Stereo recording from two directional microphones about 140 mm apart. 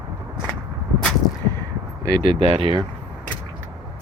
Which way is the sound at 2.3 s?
40° right (ahead or behind).